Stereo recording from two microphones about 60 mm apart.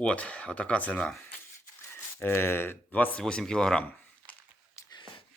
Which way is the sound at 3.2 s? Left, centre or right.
Centre.